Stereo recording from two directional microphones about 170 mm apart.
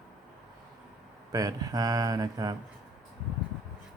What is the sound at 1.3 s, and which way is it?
Speech, 20° right (ahead or behind).